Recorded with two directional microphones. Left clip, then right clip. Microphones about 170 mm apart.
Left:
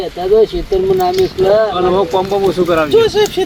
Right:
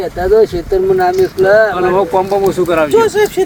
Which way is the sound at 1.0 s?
10° right (ahead or behind).